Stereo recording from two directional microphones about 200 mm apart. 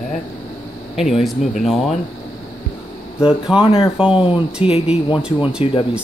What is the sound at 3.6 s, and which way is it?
Speech, 25° left (ahead or behind).